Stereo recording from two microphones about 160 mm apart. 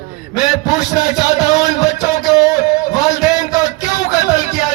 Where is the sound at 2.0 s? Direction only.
50° left (ahead or behind).